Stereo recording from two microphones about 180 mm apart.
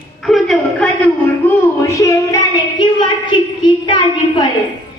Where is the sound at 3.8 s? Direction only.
25° left (ahead or behind).